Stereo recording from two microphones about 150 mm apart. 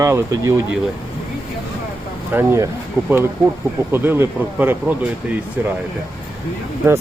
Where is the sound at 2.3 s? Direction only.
20° right (ahead or behind).